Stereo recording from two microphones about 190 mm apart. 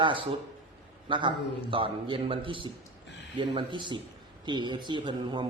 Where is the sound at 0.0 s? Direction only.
25° right (ahead or behind).